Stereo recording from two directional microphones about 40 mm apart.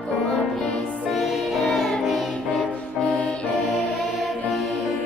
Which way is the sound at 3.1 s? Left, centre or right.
Left.